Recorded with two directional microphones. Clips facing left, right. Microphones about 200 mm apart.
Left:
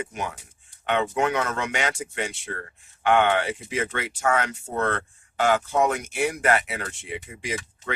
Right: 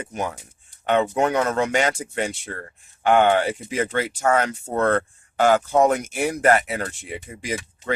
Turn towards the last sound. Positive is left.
turn(degrees=-35)  # may be behind; listen again after turning